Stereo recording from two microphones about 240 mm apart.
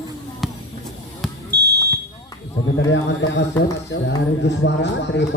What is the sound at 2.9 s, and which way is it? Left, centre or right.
A man's voice, left.